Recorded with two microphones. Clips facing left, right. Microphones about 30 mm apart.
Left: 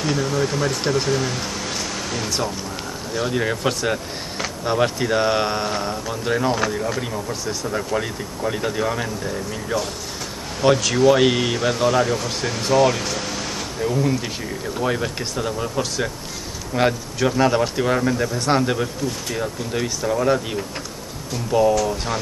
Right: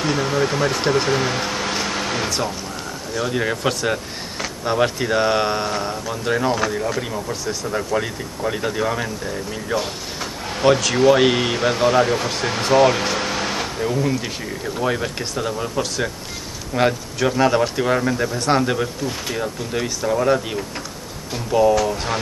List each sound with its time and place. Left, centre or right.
0.0 s speech: centre
3.2 s speech: centre